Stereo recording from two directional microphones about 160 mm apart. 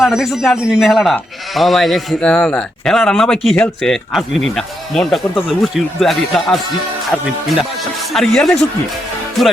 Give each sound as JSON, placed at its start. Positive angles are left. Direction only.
{"t": 0.0, "sound": "speech", "side_deg": -5}
{"t": 8.1, "sound": "speech", "side_deg": 5}